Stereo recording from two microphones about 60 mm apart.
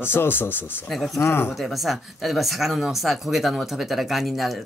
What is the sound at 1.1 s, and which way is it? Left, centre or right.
Speech, left.